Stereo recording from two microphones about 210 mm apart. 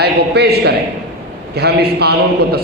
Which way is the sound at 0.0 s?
50° right (ahead or behind).